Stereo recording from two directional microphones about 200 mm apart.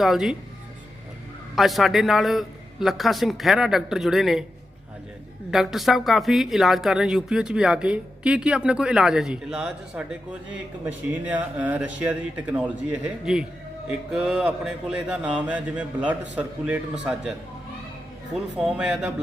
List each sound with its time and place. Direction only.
0.0 s speech: centre (ahead or behind)
1.5 s speech: centre (ahead or behind)
5.5 s speech: centre (ahead or behind)
18.5 s speech: 5° right (ahead or behind)